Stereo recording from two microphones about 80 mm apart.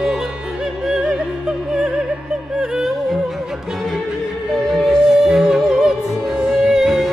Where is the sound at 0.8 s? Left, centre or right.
Centre.